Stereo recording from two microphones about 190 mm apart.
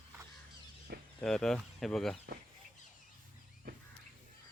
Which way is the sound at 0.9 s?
60° right (ahead or behind).